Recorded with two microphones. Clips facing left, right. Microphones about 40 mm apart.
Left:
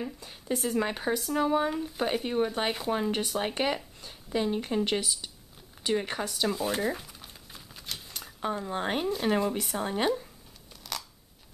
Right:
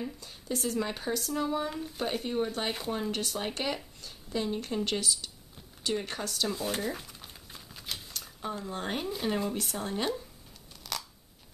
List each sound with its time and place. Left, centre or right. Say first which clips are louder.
0.0 s speech: left 2 dB; left
1.7 s speech: left 4 dB; centre
6.5 s a sound: left 3 dB; centre
8.5 s speech: left 3 dB; left
10.8 s scissors: even; centre